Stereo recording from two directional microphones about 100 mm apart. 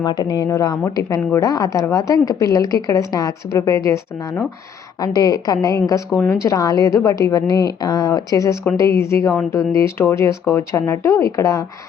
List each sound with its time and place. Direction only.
0.0 s a woman's voice: 45° left (ahead or behind)